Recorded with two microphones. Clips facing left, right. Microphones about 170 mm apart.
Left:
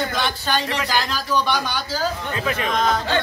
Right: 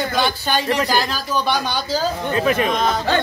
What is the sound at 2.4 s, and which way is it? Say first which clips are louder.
Speech: right 6 dB; 45° right (ahead or behind).